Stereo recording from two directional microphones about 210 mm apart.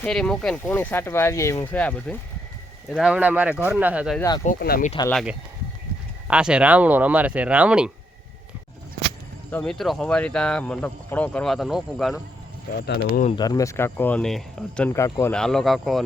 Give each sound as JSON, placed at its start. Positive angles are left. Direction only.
{"t": 0.0, "sound": "speech", "side_deg": 5}
{"t": 2.9, "sound": "speech", "side_deg": -5}
{"t": 4.4, "sound": "speech", "side_deg": 40}
{"t": 6.2, "sound": "speech", "side_deg": -5}
{"t": 9.5, "sound": "speech", "side_deg": 5}
{"t": 12.8, "sound": "speech", "side_deg": 50}
{"t": 13.2, "sound": "speech", "side_deg": 20}